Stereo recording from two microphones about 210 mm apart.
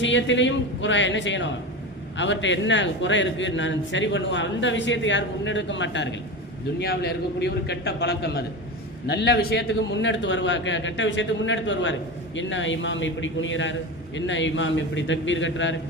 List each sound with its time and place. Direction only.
0.0 s a man's voice: 60° left (ahead or behind)
6.7 s a man's voice: 50° left (ahead or behind)